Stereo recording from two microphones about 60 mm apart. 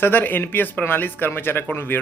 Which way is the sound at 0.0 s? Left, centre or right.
Left.